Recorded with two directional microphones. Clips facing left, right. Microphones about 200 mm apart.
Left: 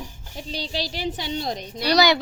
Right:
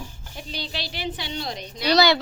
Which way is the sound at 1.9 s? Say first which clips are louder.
Even; 15° left (ahead or behind).